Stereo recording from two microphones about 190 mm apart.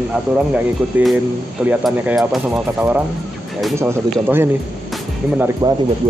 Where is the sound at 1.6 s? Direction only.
5° right (ahead or behind).